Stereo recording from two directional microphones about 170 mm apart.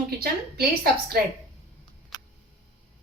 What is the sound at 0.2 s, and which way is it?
A woman's voice, 65° right (ahead or behind).